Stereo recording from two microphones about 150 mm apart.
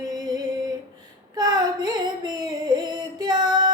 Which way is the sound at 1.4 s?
25° right (ahead or behind).